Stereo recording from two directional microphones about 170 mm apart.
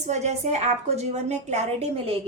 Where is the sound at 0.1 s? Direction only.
40° right (ahead or behind).